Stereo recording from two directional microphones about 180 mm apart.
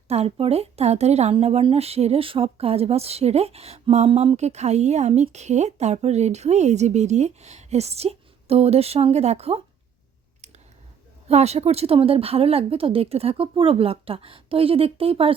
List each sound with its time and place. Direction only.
0.1 s a woman's voice: 35° right (ahead or behind)
11.3 s a woman's voice: 35° right (ahead or behind)